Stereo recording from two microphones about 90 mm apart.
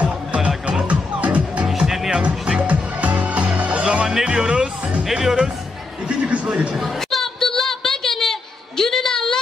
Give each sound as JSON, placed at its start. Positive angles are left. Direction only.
{"t": 0.0, "sound": "music", "side_deg": -15}
{"t": 1.7, "sound": "music", "side_deg": -5}
{"t": 6.0, "sound": "a sound", "side_deg": -15}